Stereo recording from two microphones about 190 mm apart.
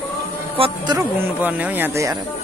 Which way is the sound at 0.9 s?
10° right (ahead or behind).